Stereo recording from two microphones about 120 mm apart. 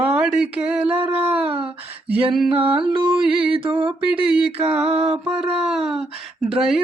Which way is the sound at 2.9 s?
45° right (ahead or behind).